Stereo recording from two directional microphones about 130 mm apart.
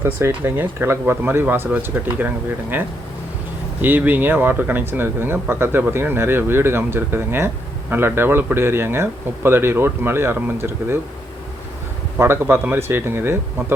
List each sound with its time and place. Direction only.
0.0 s speech: 15° right (ahead or behind)
12.1 s speech: 20° right (ahead or behind)